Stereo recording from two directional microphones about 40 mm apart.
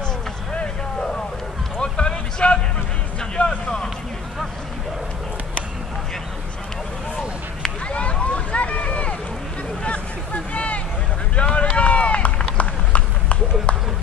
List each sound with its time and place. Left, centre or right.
1.8 s a sound: left
3.2 s vehicle: left
7.9 s vehicle: left
9.8 s a sound: left
11.3 s boat: left
11.7 s run: left